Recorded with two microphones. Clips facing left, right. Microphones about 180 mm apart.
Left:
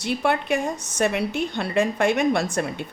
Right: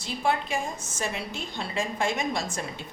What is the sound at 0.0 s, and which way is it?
A woman's voice, 65° left (ahead or behind).